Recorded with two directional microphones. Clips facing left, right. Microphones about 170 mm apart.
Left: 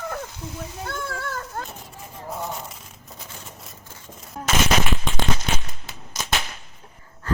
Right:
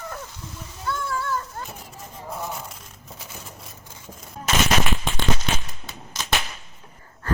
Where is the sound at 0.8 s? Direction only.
60° left (ahead or behind).